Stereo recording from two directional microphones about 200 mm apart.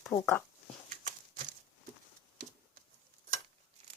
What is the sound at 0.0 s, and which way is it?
Speech, 10° left (ahead or behind).